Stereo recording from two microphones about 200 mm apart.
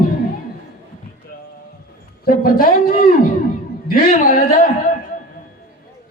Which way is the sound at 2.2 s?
45° left (ahead or behind).